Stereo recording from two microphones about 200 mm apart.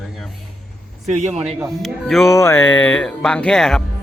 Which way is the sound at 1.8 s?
Centre (ahead or behind).